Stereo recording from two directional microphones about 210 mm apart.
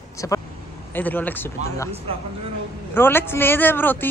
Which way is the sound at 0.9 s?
10° left (ahead or behind).